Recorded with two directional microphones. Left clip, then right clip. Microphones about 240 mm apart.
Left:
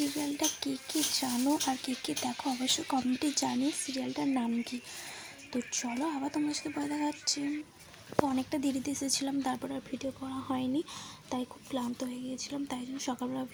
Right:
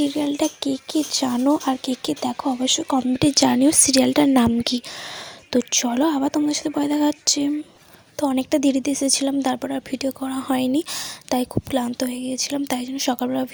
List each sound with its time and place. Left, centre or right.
0.1 s speech: right